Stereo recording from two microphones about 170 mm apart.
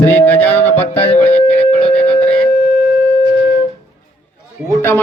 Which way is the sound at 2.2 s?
5° left (ahead or behind).